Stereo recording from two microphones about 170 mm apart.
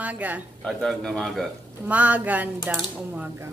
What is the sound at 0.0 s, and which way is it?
Speech, 10° right (ahead or behind).